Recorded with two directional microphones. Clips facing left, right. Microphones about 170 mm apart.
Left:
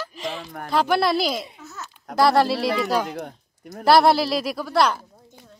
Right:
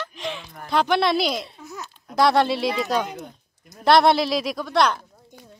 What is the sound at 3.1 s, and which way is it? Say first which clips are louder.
Speech: left 4 dB; 70° left (ahead or behind).